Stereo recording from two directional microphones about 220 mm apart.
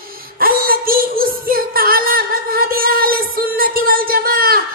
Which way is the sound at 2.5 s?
40° right (ahead or behind).